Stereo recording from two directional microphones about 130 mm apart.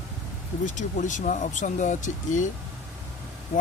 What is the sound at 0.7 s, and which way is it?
Speech, 75° left (ahead or behind).